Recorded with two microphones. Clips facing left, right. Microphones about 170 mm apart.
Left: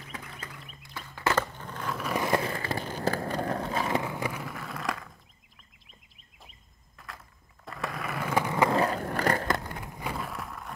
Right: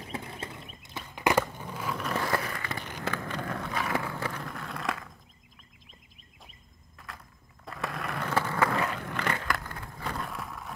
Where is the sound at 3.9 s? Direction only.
15° left (ahead or behind); by 5.2 s centre (ahead or behind).